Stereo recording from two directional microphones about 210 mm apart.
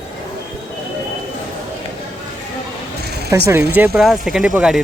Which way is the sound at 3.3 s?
15° right (ahead or behind).